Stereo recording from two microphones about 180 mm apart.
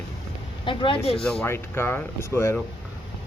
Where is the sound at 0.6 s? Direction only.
25° left (ahead or behind).